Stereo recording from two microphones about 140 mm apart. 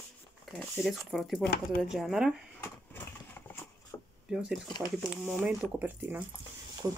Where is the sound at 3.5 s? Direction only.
20° left (ahead or behind).